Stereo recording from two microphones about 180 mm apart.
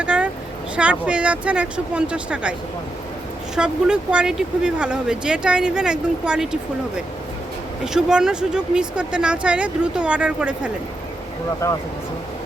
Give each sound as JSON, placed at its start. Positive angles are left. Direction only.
{"t": 0.0, "sound": "vehicle", "side_deg": -5}
{"t": 0.8, "sound": "speech", "side_deg": -5}
{"t": 11.6, "sound": "speech", "side_deg": 15}